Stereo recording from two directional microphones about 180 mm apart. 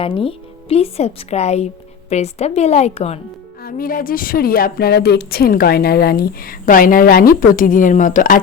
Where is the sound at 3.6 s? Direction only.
55° left (ahead or behind).